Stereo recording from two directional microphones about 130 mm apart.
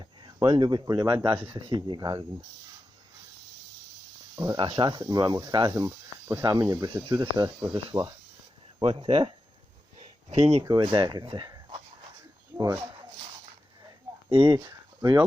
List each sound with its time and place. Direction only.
0.0 s a sound: 35° right (ahead or behind)
0.3 s speech: 35° right (ahead or behind)
4.4 s speech: 35° right (ahead or behind)
8.8 s speech: 45° right (ahead or behind)
10.0 s a sound: 45° right (ahead or behind)
10.6 s speech: 30° right (ahead or behind)
12.5 s speech: 20° right (ahead or behind)
14.3 s speech: 45° right (ahead or behind)